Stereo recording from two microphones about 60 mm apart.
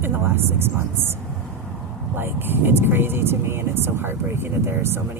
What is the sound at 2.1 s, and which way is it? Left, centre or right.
Speech, right.